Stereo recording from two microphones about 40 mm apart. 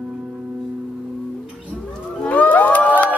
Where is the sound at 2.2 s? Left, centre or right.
Left.